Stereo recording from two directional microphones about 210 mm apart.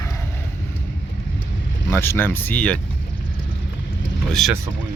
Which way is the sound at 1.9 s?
10° left (ahead or behind).